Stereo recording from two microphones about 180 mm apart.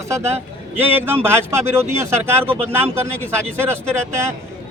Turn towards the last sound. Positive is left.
turn(degrees=-15)  # may be behind; listen again after turning